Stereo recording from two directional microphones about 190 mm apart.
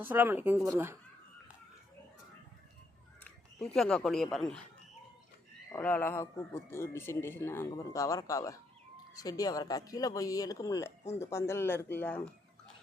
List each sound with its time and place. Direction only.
0.0 s speech: 10° right (ahead or behind)
3.8 s speech: centre (ahead or behind)
5.7 s speech: 10° left (ahead or behind)